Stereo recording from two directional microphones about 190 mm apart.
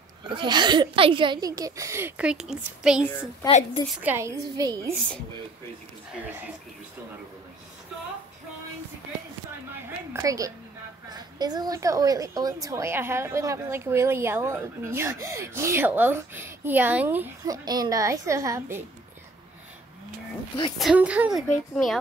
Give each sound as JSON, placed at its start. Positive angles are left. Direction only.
{"t": 0.2, "sound": "a child's voice", "side_deg": -25}
{"t": 3.4, "sound": "a woman's voice", "side_deg": 30}
{"t": 3.9, "sound": "a woman's voice", "side_deg": -10}
{"t": 6.2, "sound": "a woman's voice", "side_deg": -10}
{"t": 10.1, "sound": "a woman's voice", "side_deg": -15}
{"t": 20.7, "sound": "a woman's voice", "side_deg": -5}